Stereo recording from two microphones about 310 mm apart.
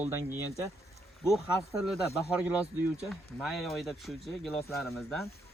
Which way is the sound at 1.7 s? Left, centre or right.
Centre.